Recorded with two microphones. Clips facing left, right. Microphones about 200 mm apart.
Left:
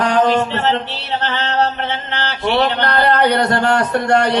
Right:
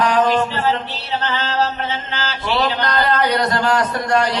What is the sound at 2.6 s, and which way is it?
Chant, 65° left (ahead or behind).